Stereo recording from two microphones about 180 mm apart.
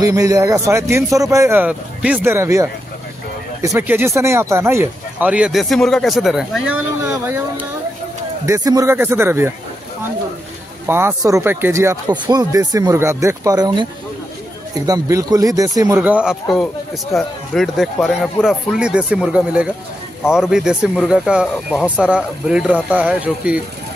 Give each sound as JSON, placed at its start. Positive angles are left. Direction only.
{"t": 0.0, "sound": "speech", "side_deg": -20}
{"t": 10.9, "sound": "speech", "side_deg": -15}
{"t": 14.9, "sound": "speech", "side_deg": -20}
{"t": 16.0, "sound": "speech", "side_deg": -5}